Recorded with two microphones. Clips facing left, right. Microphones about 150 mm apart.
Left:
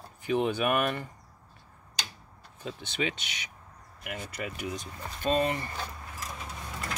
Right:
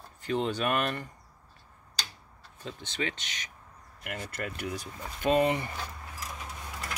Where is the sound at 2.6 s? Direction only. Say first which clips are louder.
Left 2 dB; 15° left (ahead or behind).